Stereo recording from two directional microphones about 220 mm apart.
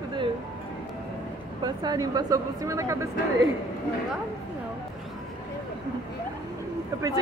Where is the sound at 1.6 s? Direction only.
20° right (ahead or behind).